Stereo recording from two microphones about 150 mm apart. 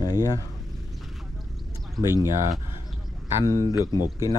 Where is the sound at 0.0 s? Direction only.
20° left (ahead or behind).